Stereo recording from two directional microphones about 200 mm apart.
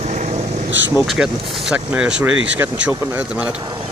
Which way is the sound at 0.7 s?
65° right (ahead or behind).